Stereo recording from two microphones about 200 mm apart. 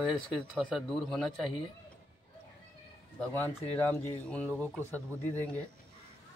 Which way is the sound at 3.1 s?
10° left (ahead or behind).